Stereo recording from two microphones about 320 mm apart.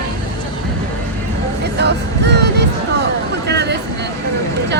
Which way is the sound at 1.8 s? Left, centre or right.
Right.